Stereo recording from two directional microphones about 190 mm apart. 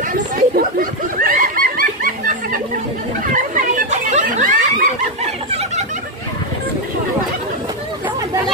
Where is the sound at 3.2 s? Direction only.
45° right (ahead or behind).